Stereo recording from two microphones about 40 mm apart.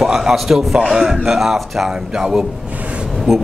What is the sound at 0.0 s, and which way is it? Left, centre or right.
A man's voice, centre.